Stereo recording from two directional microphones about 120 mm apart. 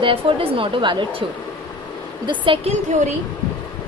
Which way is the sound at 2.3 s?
45° right (ahead or behind).